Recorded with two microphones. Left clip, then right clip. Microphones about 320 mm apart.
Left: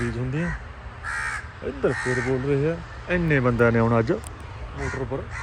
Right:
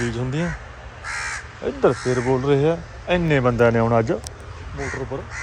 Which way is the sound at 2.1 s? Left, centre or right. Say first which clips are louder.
Right 4 dB; right.